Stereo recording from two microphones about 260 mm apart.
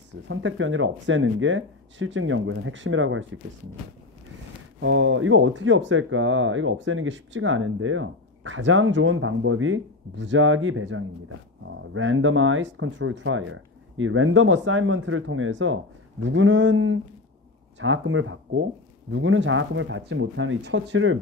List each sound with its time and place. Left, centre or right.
0.3 s speech: right
4.7 s speech: right